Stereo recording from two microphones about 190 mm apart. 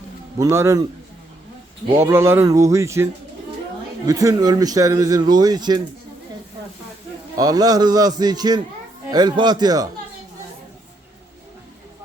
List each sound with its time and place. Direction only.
0.3 s speech: 15° right (ahead or behind)
2.0 s speech: 15° right (ahead or behind)
7.3 s speech: 20° right (ahead or behind)